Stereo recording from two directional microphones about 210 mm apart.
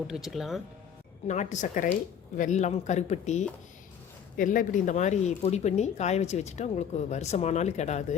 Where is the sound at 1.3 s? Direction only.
35° left (ahead or behind).